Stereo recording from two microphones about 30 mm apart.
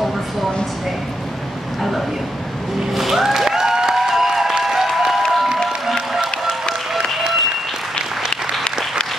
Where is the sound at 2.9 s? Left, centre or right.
Centre.